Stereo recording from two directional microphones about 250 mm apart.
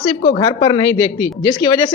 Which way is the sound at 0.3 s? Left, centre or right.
Centre.